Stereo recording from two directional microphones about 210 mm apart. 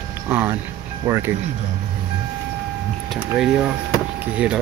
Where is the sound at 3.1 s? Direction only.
5° right (ahead or behind).